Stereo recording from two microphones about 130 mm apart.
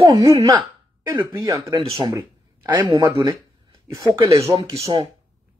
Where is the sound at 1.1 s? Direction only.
25° right (ahead or behind).